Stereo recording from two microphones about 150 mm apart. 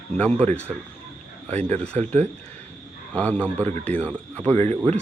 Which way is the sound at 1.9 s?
10° left (ahead or behind).